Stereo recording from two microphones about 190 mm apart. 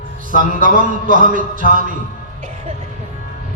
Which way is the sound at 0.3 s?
45° right (ahead or behind).